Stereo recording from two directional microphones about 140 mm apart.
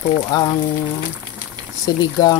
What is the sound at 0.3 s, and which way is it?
Speech, 25° left (ahead or behind).